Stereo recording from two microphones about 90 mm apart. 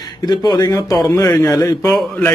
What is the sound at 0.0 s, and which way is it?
Speech, 50° left (ahead or behind).